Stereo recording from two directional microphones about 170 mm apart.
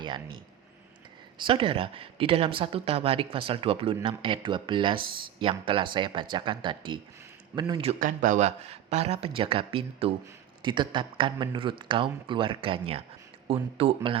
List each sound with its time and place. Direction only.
0.0 s speech: 25° right (ahead or behind)
1.4 s speech: 30° right (ahead or behind)
7.9 s speech: 50° right (ahead or behind); by 14.2 s 35° right (ahead or behind)